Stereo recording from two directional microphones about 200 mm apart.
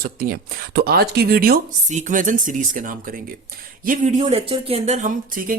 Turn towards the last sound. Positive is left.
turn(degrees=-35)  # may be behind; listen again after turning